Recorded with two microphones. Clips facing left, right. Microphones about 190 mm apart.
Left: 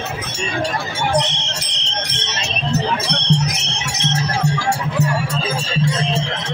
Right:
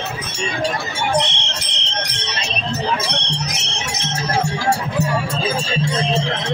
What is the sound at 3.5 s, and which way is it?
Music, 60° left (ahead or behind).